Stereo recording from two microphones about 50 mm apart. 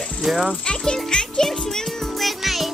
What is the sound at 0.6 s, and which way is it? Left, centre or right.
Speech, centre.